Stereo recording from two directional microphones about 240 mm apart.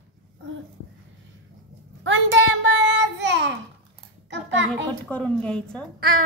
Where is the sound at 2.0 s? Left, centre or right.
Right.